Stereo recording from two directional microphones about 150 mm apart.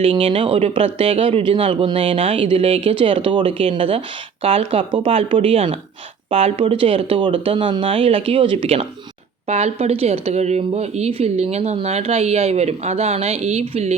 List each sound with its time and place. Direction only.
0.0 s speech: 35° right (ahead or behind)